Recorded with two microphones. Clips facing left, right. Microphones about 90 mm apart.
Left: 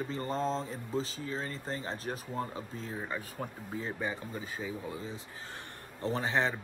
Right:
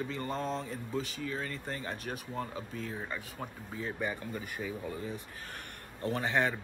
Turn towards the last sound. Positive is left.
turn(degrees=25)  # may be behind; listen again after turning